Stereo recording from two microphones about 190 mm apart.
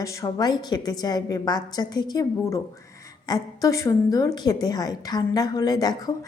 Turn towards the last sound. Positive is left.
turn(degrees=20)  # may be behind; listen again after turning